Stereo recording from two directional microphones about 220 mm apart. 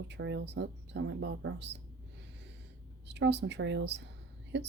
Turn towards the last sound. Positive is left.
turn(degrees=-50)  # may be behind; listen again after turning